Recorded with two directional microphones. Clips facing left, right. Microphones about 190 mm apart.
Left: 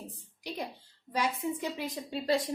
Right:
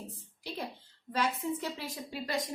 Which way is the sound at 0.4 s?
15° left (ahead or behind).